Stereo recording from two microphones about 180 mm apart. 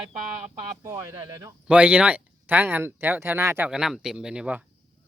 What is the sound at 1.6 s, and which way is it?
Speech, 5° right (ahead or behind).